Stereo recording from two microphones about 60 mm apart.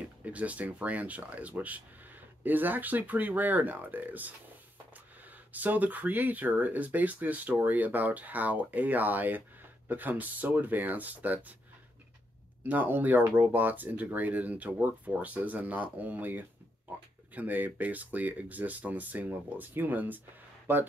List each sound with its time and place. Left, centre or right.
0.2 s speech: right
5.5 s speech: right
12.6 s speech: right